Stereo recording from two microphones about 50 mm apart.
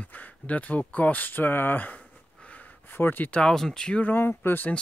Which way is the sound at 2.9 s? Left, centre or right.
Left.